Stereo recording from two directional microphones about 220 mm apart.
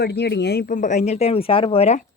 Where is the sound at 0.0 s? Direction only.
50° left (ahead or behind).